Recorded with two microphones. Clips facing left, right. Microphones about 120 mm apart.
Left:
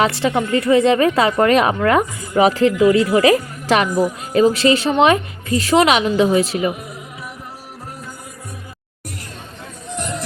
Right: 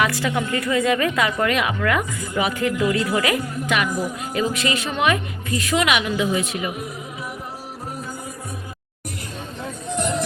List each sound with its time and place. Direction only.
0.0 s a woman's voice: 25° left (ahead or behind)